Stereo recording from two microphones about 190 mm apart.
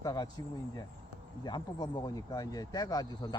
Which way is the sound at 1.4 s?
20° left (ahead or behind).